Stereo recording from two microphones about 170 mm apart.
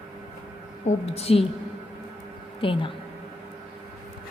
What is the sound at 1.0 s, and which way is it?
Speech, 35° left (ahead or behind).